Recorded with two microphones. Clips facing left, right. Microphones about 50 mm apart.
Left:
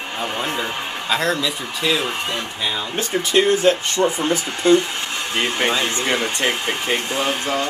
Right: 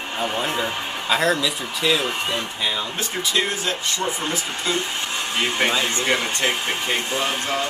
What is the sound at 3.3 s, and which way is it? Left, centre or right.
Speech, left.